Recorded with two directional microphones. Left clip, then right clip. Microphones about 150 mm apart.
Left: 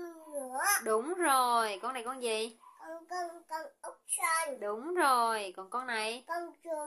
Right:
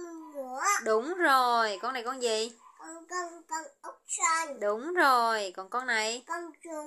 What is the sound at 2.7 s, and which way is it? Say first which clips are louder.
Child singing: right 3 dB; 20° left (ahead or behind).